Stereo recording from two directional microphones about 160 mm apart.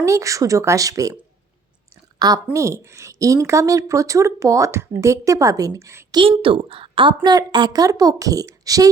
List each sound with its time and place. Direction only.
0.0 s a woman's voice: 20° right (ahead or behind)
2.1 s a woman's voice: 25° right (ahead or behind)
6.1 s a woman's voice: 30° right (ahead or behind)